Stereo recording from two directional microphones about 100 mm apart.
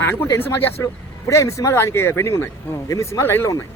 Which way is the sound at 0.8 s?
30° left (ahead or behind).